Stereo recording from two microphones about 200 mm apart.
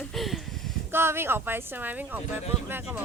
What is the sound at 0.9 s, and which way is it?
Speech, 10° right (ahead or behind).